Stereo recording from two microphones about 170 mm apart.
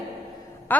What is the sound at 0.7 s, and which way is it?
Speech, 10° left (ahead or behind).